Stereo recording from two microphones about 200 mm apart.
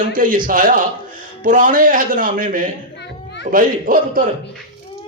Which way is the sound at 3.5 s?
45° right (ahead or behind).